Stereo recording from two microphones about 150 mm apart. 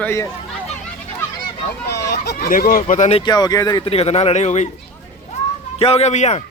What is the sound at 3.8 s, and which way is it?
Speech, 40° left (ahead or behind).